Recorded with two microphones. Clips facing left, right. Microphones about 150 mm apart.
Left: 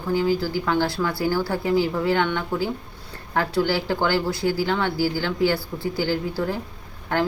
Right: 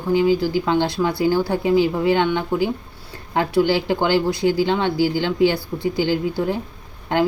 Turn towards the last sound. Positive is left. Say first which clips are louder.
# right 4 dB
turn(degrees=-15)  # may be behind; listen again after turning